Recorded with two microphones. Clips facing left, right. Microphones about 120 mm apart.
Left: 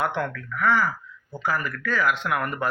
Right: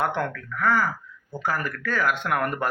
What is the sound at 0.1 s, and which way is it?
Speech, 45° right (ahead or behind).